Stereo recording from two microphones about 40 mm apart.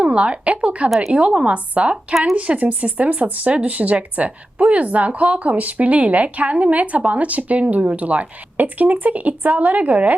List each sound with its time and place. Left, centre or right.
0.0 s a woman's voice: right